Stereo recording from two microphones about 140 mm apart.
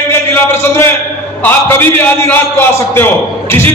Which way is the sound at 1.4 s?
15° left (ahead or behind).